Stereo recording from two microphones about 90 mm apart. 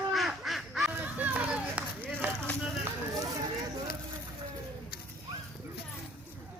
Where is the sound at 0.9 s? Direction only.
20° right (ahead or behind).